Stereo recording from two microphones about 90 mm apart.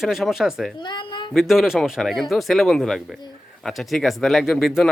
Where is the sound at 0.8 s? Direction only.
60° left (ahead or behind).